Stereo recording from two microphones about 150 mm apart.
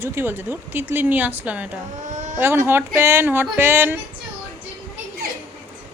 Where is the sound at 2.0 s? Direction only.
55° right (ahead or behind).